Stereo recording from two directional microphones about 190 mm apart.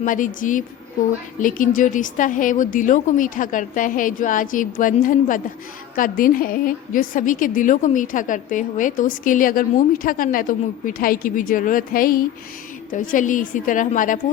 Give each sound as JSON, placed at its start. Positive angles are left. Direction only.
{"t": 0.0, "sound": "a woman's voice", "side_deg": 45}